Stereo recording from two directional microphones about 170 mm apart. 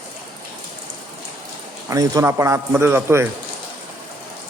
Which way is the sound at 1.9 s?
20° right (ahead or behind).